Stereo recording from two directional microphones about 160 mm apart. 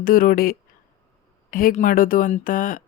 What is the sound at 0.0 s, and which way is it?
Speech, 60° left (ahead or behind).